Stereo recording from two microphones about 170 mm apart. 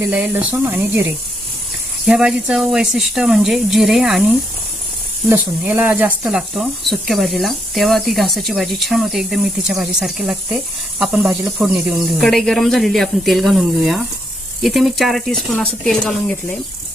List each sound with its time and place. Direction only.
0.0 s speech: 10° right (ahead or behind)
2.0 s speech: 5° right (ahead or behind)